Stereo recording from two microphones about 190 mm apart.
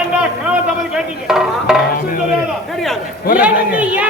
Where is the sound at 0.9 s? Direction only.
Centre (ahead or behind).